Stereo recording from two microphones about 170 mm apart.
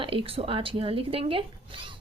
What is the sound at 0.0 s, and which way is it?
Speech, 30° right (ahead or behind).